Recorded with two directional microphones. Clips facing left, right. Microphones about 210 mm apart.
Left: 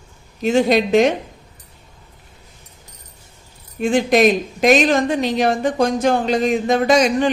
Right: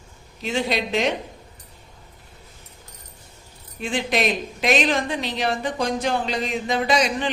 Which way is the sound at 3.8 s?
45° left (ahead or behind).